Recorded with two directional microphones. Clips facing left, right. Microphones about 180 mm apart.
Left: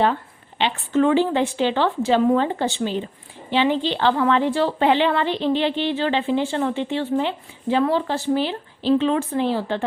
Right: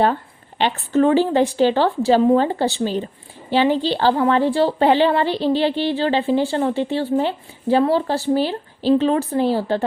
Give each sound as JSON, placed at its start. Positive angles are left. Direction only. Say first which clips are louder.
{"t": 0.6, "sound": "a woman's voice", "louder": "right 2 dB", "side_deg": -40}